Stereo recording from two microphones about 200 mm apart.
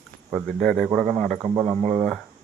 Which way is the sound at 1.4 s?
25° right (ahead or behind).